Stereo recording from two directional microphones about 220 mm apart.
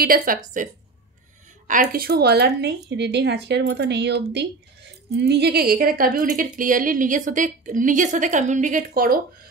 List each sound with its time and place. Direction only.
0.0 s a woman's voice: 40° right (ahead or behind)
1.7 s a woman's voice: 40° right (ahead or behind)